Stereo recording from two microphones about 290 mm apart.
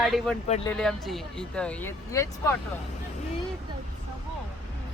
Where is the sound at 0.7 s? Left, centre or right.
Centre.